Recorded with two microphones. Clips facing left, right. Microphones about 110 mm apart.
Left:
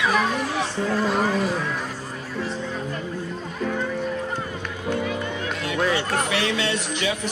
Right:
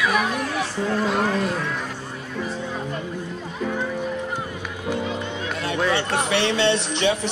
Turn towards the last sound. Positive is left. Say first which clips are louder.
# right 5 dB
turn(degrees=-30)  # may be behind; listen again after turning